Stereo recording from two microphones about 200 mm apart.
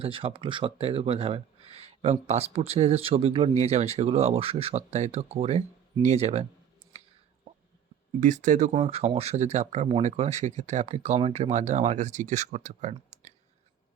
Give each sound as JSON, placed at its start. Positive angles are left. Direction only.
{"t": 0.0, "sound": "speech", "side_deg": -25}
{"t": 8.2, "sound": "speech", "side_deg": -40}